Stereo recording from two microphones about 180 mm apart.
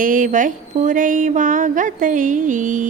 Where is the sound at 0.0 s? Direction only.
50° right (ahead or behind).